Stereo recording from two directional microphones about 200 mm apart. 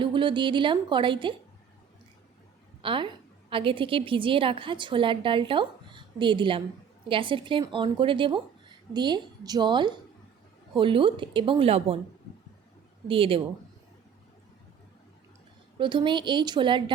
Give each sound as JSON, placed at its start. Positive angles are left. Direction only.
{"t": 0.0, "sound": "a woman's voice", "side_deg": -25}
{"t": 2.8, "sound": "a woman's voice", "side_deg": -25}
{"t": 13.1, "sound": "a woman's voice", "side_deg": -25}
{"t": 15.8, "sound": "a woman's voice", "side_deg": -25}